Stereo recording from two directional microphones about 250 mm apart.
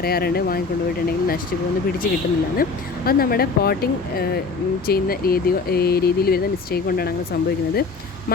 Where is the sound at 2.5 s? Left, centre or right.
Left.